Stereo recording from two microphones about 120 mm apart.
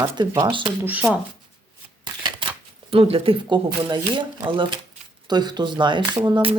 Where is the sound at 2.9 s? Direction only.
50° right (ahead or behind).